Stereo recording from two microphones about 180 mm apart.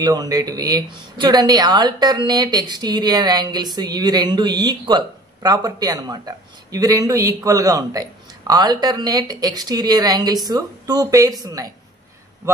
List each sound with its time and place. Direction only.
0.0 s speech: 20° right (ahead or behind)